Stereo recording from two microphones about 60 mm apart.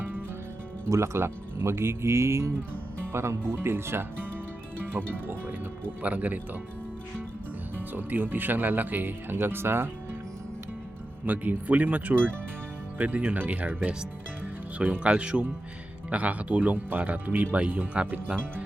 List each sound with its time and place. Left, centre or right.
0.9 s speech: right
7.8 s speech: right
11.3 s speech: right